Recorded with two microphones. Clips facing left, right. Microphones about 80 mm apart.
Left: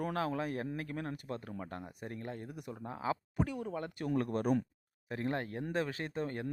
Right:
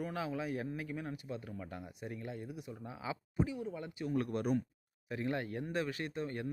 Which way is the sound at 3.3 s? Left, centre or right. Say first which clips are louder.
Left 1 dB; left.